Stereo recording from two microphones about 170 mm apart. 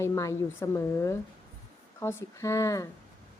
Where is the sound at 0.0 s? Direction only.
15° left (ahead or behind).